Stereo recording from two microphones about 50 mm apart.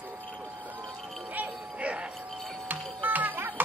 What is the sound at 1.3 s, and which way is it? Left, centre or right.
Music, right.